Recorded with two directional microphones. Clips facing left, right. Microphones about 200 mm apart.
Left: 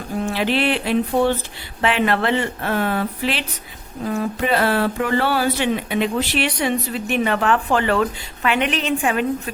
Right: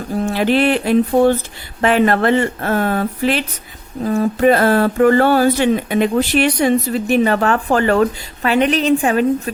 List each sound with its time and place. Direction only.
0.3 s speech: 45° right (ahead or behind)